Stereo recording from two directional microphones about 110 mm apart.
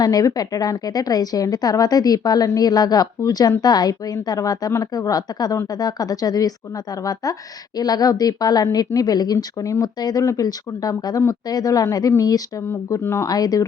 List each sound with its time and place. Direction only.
0.0 s a woman's voice: 35° left (ahead or behind)
12.6 s speech: 20° left (ahead or behind)